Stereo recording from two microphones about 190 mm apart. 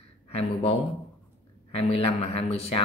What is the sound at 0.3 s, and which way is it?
Speech, 30° left (ahead or behind).